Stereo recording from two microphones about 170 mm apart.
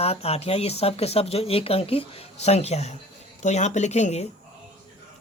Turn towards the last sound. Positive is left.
turn(degrees=40)  # may be behind; listen again after turning